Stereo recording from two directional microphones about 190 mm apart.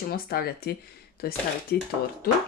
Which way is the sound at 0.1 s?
55° left (ahead or behind).